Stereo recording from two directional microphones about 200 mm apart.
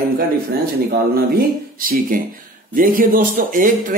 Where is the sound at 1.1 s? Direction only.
50° right (ahead or behind).